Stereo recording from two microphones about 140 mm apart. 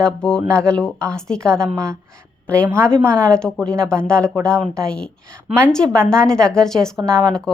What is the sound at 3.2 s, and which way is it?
A woman's voice, 5° left (ahead or behind).